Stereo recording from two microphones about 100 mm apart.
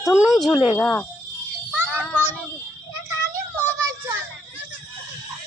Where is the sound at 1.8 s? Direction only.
20° left (ahead or behind).